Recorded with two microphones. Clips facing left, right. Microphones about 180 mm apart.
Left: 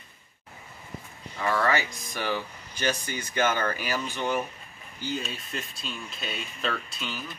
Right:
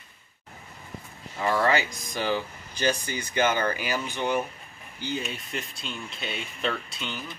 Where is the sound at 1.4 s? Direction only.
20° right (ahead or behind).